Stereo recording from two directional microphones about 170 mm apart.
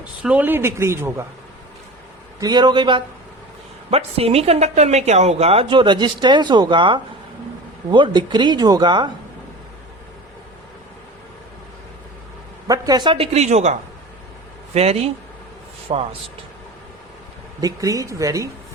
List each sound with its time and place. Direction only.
0.2 s speech: 10° right (ahead or behind)
2.4 s a woman's voice: 25° right (ahead or behind)
12.6 s a woman's voice: 20° right (ahead or behind); by 16.0 s 35° right (ahead or behind)
17.6 s speech: 20° right (ahead or behind)